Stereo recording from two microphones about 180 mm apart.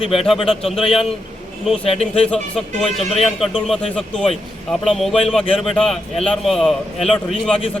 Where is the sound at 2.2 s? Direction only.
5° left (ahead or behind).